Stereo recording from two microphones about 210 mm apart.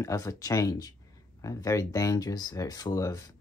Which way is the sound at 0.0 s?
15° left (ahead or behind).